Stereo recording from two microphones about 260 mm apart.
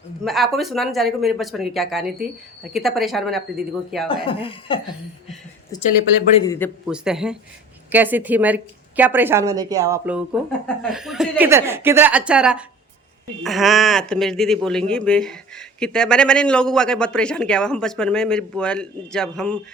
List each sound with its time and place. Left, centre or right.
0.3 s speech: centre
4.3 s speech: left
6.8 s a woman's voice: centre